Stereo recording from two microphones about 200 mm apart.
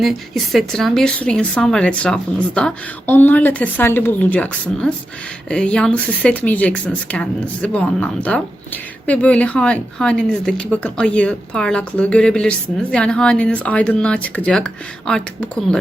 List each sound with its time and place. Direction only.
0.0 s speech: centre (ahead or behind)